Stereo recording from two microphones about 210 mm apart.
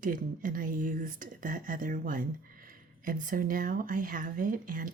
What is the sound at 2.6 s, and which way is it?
Speech, 40° right (ahead or behind).